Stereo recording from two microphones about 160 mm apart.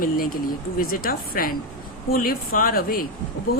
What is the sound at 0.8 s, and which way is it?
A woman's voice, 65° left (ahead or behind).